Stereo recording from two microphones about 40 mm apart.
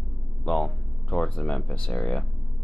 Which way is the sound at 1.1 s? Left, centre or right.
Left.